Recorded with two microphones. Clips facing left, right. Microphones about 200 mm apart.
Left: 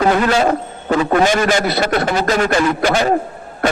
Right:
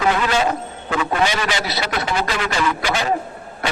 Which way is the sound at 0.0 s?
45° left (ahead or behind).